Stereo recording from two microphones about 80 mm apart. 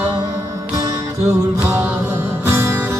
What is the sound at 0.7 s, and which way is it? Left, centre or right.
Music, right.